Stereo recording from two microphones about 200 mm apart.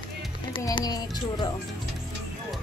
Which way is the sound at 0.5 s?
20° left (ahead or behind).